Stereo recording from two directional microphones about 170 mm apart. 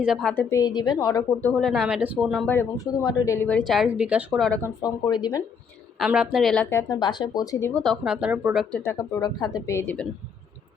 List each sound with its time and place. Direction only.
0.0 s speech: centre (ahead or behind)
0.3 s a woman's voice: 20° left (ahead or behind)
1.5 s speech: centre (ahead or behind)
2.5 s speech: 15° left (ahead or behind)
3.7 s speech: 5° right (ahead or behind)
4.6 s a woman's voice: 20° left (ahead or behind)
6.0 s speech: 5° right (ahead or behind)
6.7 s a woman's voice: 20° left (ahead or behind)
7.7 s speech: centre (ahead or behind)
8.7 s speech: 15° left (ahead or behind)